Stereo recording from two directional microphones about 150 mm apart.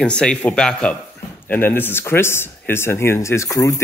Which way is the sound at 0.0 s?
5° left (ahead or behind).